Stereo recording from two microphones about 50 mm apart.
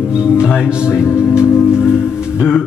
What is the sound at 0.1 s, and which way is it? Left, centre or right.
Music, centre.